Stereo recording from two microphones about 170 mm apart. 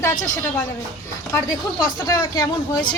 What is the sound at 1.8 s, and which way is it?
Speech, 20° left (ahead or behind).